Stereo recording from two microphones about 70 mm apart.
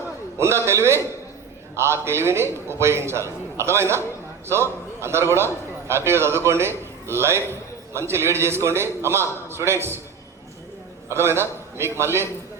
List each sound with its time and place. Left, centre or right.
0.3 s a man's voice: right
11.1 s a man's voice: right